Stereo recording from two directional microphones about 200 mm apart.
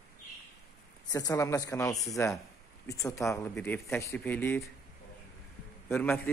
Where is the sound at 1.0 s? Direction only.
15° left (ahead or behind).